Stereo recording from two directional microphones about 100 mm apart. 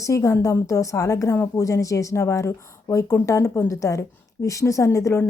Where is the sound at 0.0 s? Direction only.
30° left (ahead or behind).